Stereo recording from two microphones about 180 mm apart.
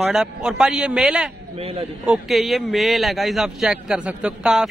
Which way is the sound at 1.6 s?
35° right (ahead or behind).